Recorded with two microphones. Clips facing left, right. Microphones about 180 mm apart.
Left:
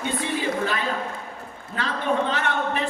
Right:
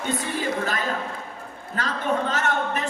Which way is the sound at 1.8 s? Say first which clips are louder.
Left 1 dB; 40° right (ahead or behind).